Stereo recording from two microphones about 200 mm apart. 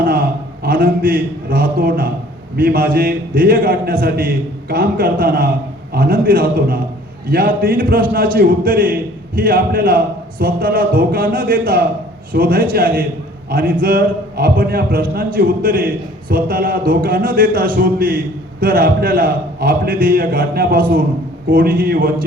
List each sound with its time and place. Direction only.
0.0 s a man's voice: 45° right (ahead or behind)